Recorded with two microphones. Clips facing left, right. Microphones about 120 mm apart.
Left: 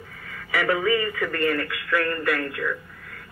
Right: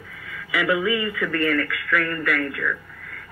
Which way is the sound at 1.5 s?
25° left (ahead or behind).